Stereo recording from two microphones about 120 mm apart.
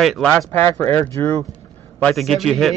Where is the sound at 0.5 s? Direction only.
20° left (ahead or behind).